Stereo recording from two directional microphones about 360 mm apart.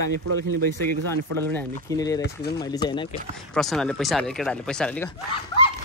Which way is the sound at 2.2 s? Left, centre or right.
Left.